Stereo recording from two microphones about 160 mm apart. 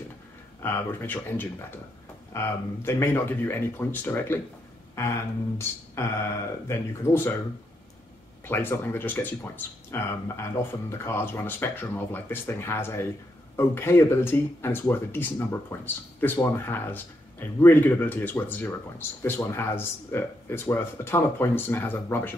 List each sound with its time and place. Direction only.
0.6 s speech: 15° left (ahead or behind)
6.0 s speech: 15° left (ahead or behind)
8.5 s speech: 15° left (ahead or behind)